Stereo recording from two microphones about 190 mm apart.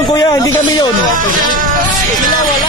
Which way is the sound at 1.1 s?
45° right (ahead or behind).